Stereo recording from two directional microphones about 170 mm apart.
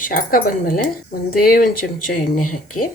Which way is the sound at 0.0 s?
55° left (ahead or behind).